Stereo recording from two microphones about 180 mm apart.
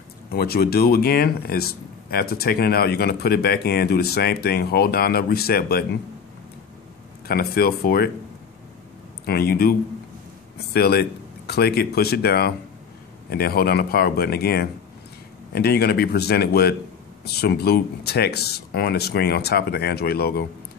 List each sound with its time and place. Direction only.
0.3 s speech: 60° left (ahead or behind)
7.2 s speech: 55° left (ahead or behind)
9.2 s speech: 60° left (ahead or behind)